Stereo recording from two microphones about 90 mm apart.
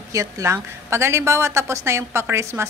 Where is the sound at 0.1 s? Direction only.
35° right (ahead or behind).